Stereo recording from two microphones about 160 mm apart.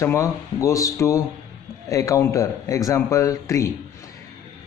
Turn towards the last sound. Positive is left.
turn(degrees=20)  # may be behind; listen again after turning